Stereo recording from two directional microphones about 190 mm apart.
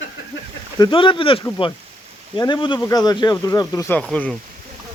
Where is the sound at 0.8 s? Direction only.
25° left (ahead or behind).